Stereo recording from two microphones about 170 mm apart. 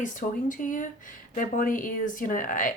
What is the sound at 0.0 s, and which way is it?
Speech, 50° left (ahead or behind).